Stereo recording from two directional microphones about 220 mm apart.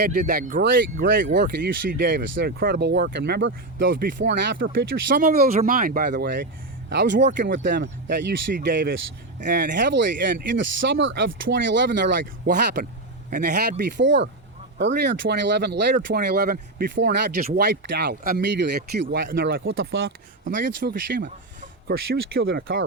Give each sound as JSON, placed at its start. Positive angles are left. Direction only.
{"t": 0.1, "sound": "speech", "side_deg": -40}
{"t": 1.0, "sound": "speech", "side_deg": -55}